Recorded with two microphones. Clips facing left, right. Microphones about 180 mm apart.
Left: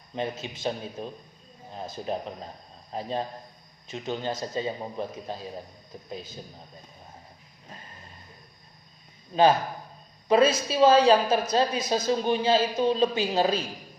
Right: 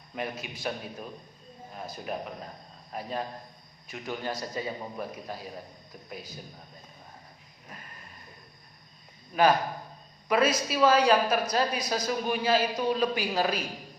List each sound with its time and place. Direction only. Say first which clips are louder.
0.2 s a woman's voice: left 4 dB; 25° left (ahead or behind)
9.3 s a woman's voice: left 2 dB; 25° left (ahead or behind)